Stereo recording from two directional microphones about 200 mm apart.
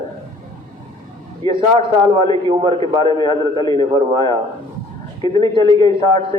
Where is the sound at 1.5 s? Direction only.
25° right (ahead or behind).